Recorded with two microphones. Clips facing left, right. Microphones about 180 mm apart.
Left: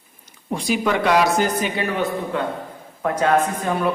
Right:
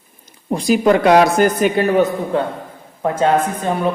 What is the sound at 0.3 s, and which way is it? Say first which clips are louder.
A woman's voice: right 7 dB; 40° right (ahead or behind).